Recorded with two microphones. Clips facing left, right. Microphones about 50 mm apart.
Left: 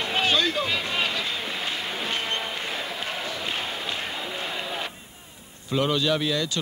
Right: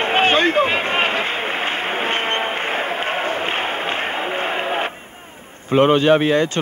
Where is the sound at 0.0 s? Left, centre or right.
Right.